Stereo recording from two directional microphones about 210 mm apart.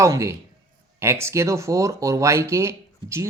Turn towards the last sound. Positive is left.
turn(degrees=-15)  # may be behind; listen again after turning